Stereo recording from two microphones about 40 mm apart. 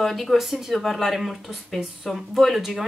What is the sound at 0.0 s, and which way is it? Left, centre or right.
Speech, centre.